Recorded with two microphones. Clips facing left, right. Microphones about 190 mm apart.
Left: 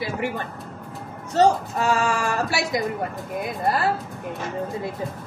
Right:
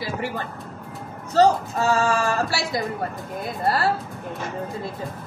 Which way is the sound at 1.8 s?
20° right (ahead or behind).